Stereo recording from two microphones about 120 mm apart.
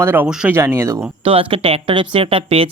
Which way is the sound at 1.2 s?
50° right (ahead or behind).